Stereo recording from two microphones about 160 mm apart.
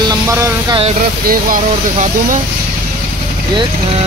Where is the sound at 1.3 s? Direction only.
55° right (ahead or behind).